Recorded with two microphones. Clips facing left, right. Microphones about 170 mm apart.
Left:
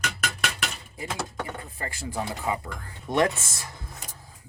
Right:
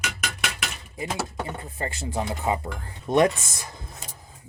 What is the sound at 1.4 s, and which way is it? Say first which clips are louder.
Speech: right 4 dB; 20° right (ahead or behind).